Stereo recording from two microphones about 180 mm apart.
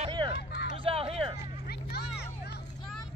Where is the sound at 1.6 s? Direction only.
65° left (ahead or behind).